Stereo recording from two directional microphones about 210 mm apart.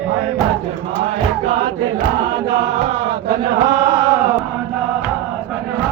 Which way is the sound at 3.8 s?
20° right (ahead or behind).